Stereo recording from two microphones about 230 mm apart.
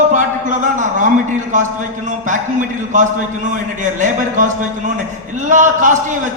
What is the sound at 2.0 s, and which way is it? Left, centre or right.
Speech, right.